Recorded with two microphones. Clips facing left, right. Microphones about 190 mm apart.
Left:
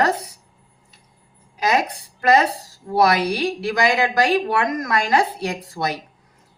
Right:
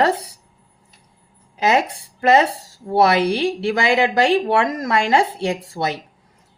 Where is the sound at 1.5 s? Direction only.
25° right (ahead or behind).